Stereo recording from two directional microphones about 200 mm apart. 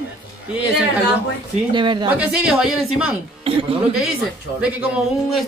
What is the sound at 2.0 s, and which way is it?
Speech, 5° right (ahead or behind).